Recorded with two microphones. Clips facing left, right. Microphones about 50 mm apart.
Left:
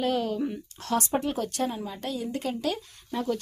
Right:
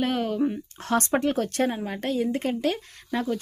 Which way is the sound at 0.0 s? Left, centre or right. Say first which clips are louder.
Right 1 dB; right.